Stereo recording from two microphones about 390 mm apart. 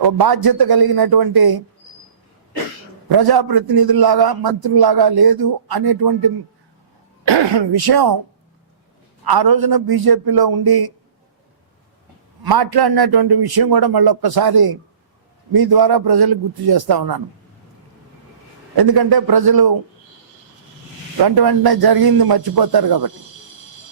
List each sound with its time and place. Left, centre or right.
0.0 s a man's voice: right
3.1 s a man's voice: right
7.3 s a man's voice: right
9.2 s a man's voice: right
12.4 s a man's voice: right
18.8 s a man's voice: right
21.2 s a man's voice: right